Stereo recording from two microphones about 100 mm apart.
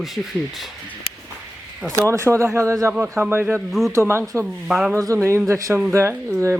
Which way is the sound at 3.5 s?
Centre (ahead or behind).